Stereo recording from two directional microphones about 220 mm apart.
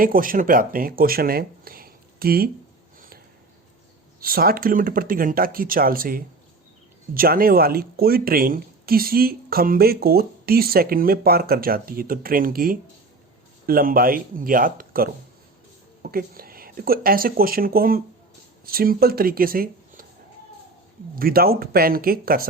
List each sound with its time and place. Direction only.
0.0 s speech: 40° right (ahead or behind)
4.2 s speech: 40° right (ahead or behind)
16.1 s speech: 40° right (ahead or behind)
21.2 s speech: 40° right (ahead or behind)